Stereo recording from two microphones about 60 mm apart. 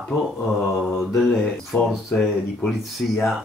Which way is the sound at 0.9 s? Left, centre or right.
Centre.